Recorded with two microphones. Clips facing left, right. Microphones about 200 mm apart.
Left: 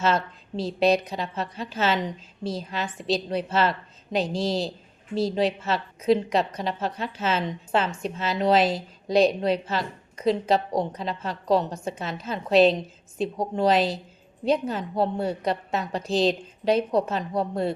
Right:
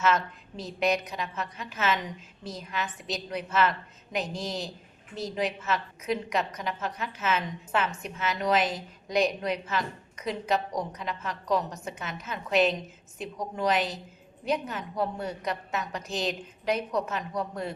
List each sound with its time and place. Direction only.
0.0 s a woman's voice: 30° left (ahead or behind)